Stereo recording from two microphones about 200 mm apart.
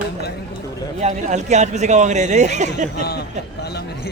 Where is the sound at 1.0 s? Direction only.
35° right (ahead or behind).